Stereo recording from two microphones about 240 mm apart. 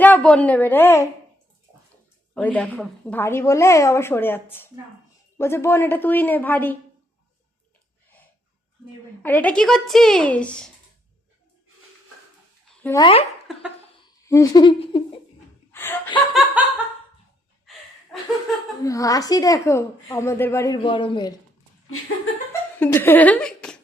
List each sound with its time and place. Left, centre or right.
0.0 s a woman's voice: centre
2.3 s a woman's voice: centre
9.2 s a woman's voice: centre
12.8 s speech: centre
14.3 s a woman's voice: centre
15.7 s chuckle: centre
16.1 s laughter: centre
18.8 s a woman's voice: centre
22.8 s speech: centre